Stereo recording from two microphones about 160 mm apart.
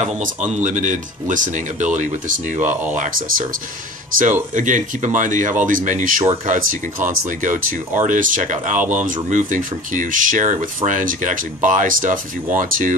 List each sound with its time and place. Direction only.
0.0 s speech: 50° right (ahead or behind)